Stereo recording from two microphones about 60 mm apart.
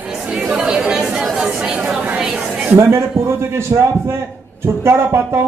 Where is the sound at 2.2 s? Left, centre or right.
Centre.